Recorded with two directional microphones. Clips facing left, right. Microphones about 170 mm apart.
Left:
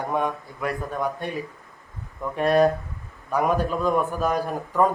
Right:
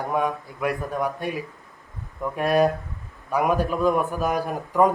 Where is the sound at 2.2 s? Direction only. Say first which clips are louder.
Left 1 dB; 5° right (ahead or behind).